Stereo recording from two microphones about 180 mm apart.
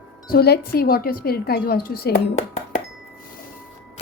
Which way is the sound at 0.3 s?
60° left (ahead or behind).